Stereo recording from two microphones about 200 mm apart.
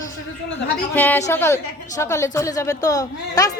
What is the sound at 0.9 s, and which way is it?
A woman's voice, 10° left (ahead or behind).